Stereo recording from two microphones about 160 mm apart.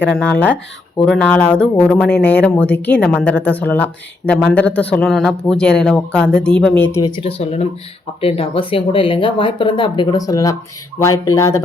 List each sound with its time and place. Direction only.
0.1 s speech: 5° left (ahead or behind)
7.0 s speech: 30° left (ahead or behind)